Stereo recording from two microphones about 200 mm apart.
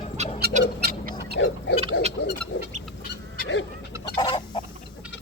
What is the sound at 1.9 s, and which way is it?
Frog, 60° left (ahead or behind).